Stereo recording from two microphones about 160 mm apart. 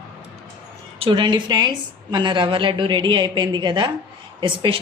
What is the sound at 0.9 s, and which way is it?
A woman's voice, 35° right (ahead or behind).